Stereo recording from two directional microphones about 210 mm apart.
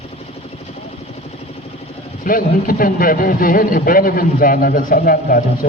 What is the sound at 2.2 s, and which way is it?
Speech, 40° left (ahead or behind).